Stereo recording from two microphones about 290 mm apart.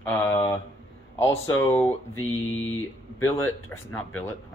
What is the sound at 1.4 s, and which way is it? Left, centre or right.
Speech, centre.